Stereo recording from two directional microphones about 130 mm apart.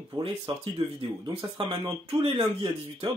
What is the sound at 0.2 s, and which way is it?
Speech, 45° right (ahead or behind).